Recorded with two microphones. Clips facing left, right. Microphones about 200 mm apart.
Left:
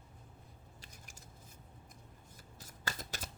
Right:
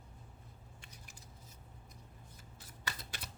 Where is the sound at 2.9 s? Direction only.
45° left (ahead or behind).